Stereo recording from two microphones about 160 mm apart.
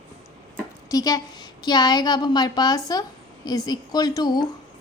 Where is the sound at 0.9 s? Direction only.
20° left (ahead or behind).